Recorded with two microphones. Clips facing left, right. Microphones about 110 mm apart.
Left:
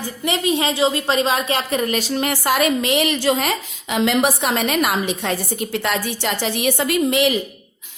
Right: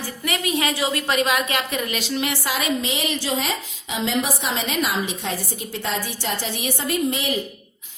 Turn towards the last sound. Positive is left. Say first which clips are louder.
# left 6 dB
turn(degrees=80)